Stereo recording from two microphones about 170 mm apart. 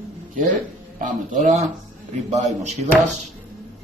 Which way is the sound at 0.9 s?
50° right (ahead or behind).